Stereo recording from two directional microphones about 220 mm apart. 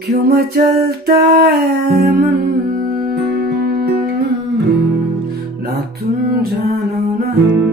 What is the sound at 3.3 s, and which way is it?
Music, 45° right (ahead or behind).